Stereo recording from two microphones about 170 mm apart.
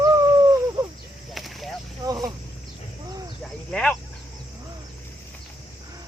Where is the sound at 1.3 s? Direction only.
Centre (ahead or behind).